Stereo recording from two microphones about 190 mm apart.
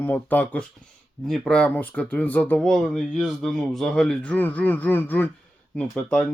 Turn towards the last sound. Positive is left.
turn(degrees=5)  # may be behind; listen again after turning